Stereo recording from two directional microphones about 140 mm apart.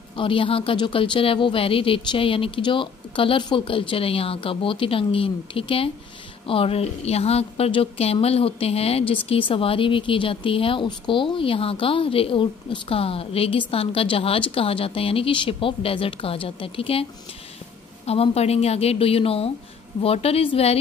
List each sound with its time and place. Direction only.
0.1 s a woman's voice: 40° left (ahead or behind)
18.0 s a woman's voice: 45° left (ahead or behind)